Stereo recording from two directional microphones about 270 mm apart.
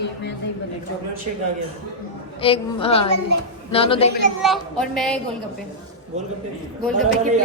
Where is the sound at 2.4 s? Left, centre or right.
Centre.